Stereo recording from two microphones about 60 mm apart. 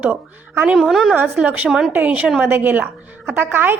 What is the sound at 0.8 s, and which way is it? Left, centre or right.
Speech, centre.